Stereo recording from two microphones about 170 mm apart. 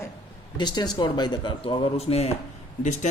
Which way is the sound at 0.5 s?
25° left (ahead or behind).